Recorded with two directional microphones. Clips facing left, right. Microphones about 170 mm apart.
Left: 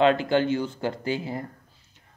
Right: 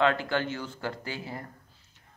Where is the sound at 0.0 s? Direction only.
20° left (ahead or behind).